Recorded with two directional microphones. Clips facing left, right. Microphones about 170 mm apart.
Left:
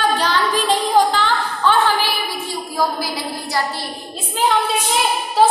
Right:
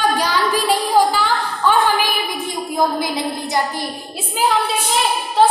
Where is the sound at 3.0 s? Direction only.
20° right (ahead or behind).